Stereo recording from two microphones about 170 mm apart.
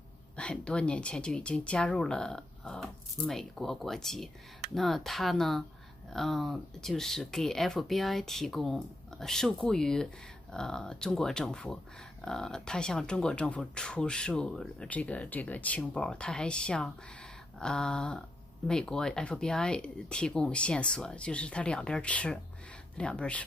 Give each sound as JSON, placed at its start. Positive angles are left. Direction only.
{"t": 0.4, "sound": "speech", "side_deg": 5}